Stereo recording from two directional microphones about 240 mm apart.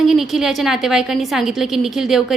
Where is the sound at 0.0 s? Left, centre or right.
Centre.